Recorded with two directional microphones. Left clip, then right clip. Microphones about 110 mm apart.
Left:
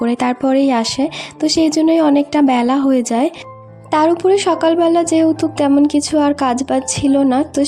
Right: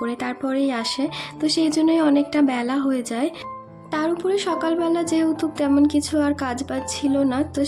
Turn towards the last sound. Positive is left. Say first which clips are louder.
# left 7 dB
turn(degrees=50)  # may be behind; listen again after turning